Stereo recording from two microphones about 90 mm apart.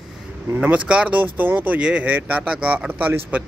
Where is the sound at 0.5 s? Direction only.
15° right (ahead or behind).